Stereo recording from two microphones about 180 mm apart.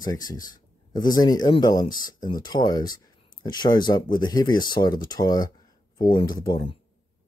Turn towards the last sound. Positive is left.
turn(degrees=25)  # may be behind; listen again after turning